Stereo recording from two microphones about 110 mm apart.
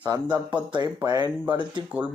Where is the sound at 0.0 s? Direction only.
40° right (ahead or behind).